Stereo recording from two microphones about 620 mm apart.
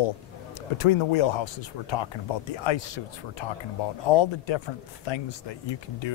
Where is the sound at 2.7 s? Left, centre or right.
Left.